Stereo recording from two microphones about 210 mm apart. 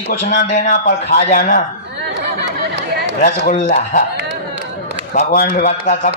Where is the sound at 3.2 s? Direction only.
40° left (ahead or behind).